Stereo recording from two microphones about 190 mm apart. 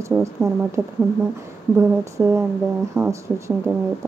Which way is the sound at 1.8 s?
15° right (ahead or behind).